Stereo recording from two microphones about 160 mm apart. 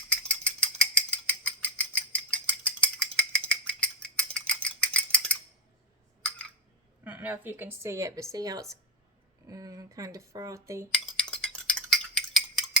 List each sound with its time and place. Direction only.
0.1 s mechanisms: 5° left (ahead or behind)
7.0 s a woman's voice: 10° right (ahead or behind)
10.9 s cutlery: 5° left (ahead or behind)